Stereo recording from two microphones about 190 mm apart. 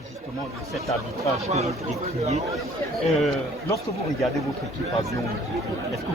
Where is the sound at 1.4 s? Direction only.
35° right (ahead or behind).